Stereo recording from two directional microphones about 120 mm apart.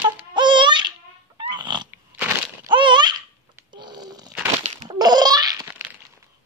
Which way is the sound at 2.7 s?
40° right (ahead or behind).